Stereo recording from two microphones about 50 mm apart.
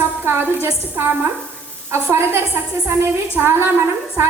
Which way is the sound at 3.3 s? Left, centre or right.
Right.